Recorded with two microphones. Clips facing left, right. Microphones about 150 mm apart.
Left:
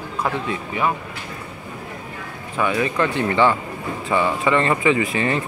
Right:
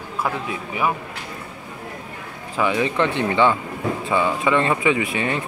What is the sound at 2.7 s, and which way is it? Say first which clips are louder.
Speech: left 1 dB; 20° right (ahead or behind).